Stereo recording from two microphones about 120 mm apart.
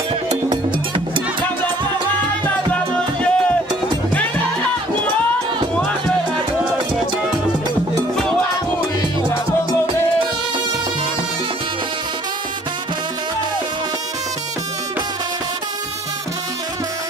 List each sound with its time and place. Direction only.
0.5 s music: 45° right (ahead or behind)
2.4 s music: 10° left (ahead or behind)